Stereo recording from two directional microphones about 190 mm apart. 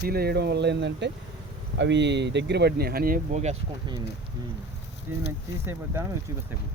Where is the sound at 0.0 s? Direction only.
55° right (ahead or behind).